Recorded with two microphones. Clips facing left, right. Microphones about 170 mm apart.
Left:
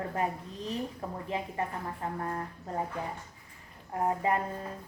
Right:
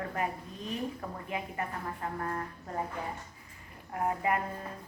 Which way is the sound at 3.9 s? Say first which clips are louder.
Left 2 dB; 30° left (ahead or behind).